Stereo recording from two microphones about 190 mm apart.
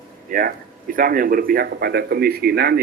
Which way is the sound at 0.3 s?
45° right (ahead or behind).